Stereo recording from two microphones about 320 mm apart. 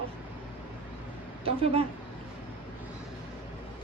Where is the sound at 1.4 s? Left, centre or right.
Centre.